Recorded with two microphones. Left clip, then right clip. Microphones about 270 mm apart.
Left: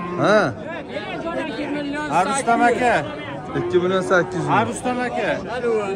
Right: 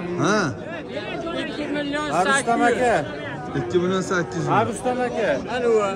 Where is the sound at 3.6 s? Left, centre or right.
Centre.